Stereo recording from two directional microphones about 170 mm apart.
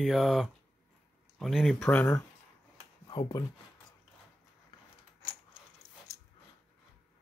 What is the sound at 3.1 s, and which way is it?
Speech, 25° left (ahead or behind).